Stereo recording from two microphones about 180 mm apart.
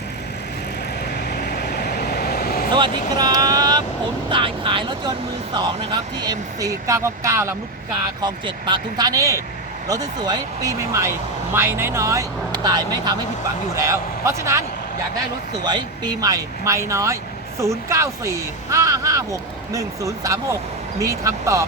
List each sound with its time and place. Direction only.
1.3 s vehicle: 65° left (ahead or behind)
2.7 s vehicle: 25° right (ahead or behind)
5.5 s speech: 25° right (ahead or behind)
15.6 s speech: 25° right (ahead or behind)